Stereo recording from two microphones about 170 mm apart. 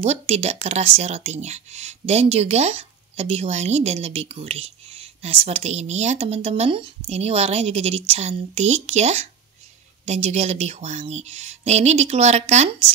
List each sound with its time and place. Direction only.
0.0 s speech: 40° right (ahead or behind)